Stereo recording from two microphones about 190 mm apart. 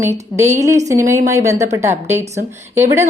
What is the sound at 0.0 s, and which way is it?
A woman's voice, 15° right (ahead or behind).